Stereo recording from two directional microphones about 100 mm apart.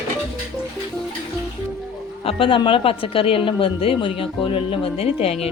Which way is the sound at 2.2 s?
60° left (ahead or behind).